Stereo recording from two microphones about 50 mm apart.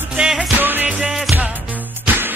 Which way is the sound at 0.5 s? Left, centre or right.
Right.